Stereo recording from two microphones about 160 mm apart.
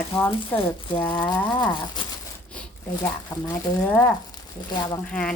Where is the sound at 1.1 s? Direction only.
25° left (ahead or behind).